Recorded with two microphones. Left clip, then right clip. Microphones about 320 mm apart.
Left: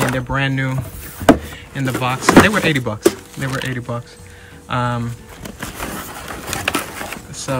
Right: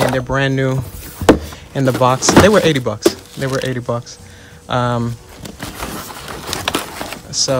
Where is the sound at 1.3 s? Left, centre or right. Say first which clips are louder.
Right 1 dB; centre.